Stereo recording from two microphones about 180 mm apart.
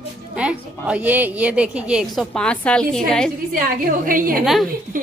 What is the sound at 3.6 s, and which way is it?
Speech, 50° right (ahead or behind).